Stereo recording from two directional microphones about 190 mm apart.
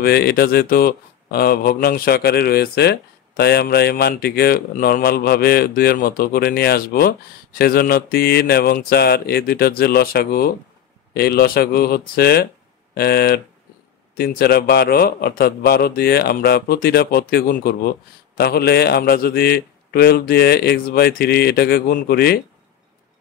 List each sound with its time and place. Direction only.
0.0 s a man's voice: 55° left (ahead or behind)